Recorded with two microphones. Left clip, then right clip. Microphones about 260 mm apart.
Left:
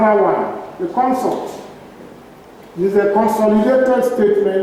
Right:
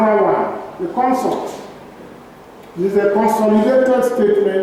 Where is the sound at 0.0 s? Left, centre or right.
Centre.